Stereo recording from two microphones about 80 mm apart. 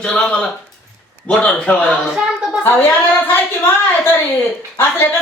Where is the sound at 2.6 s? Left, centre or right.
Left.